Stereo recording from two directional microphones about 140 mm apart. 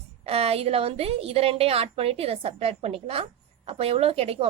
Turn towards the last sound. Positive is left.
turn(degrees=-45)  # may be behind; listen again after turning